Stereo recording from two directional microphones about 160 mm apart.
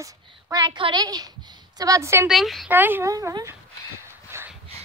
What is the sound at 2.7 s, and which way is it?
Speech, 10° right (ahead or behind).